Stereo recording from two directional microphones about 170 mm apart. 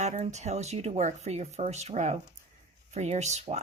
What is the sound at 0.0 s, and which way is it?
Speech, 45° right (ahead or behind).